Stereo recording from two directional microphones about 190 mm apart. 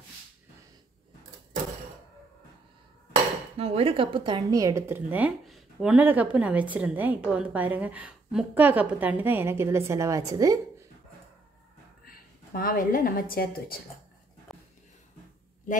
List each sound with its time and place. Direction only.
3.5 s a woman's voice: 30° right (ahead or behind)
12.0 s a woman's voice: 50° left (ahead or behind)
14.5 s a sound: centre (ahead or behind)